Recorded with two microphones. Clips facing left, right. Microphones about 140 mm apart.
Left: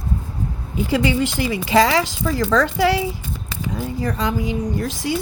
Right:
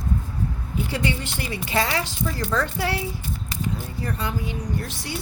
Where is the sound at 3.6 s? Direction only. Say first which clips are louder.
Left 6 dB; 90° left.